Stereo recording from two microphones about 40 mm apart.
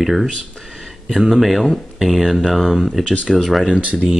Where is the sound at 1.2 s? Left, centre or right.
Centre.